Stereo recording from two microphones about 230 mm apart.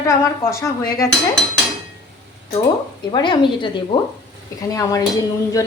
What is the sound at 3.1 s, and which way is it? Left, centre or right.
A woman's voice, centre.